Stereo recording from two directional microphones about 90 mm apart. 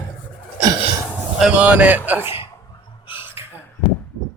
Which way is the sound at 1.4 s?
10° right (ahead or behind).